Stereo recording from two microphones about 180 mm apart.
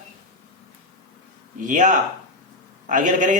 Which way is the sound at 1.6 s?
45° right (ahead or behind).